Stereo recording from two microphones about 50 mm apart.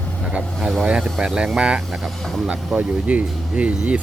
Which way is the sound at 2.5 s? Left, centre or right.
Right.